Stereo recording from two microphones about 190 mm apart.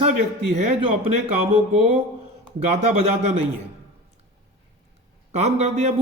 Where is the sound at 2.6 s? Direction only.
35° right (ahead or behind).